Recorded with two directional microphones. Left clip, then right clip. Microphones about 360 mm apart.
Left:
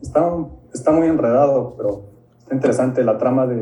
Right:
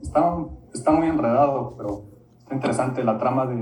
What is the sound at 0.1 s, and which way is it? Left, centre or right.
Speech, centre.